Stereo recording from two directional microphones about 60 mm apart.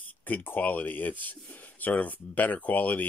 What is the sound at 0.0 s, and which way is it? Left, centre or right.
Speech, left.